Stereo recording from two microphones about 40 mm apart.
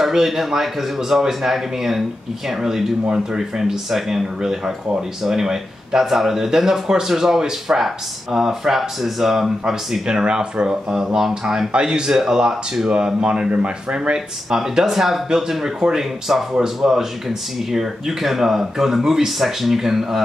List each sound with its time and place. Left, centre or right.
0.0 s speech: centre
10.0 s speech: centre
11.1 s speech: centre
11.7 s speech: right
12.1 s speech: centre
14.5 s speech: centre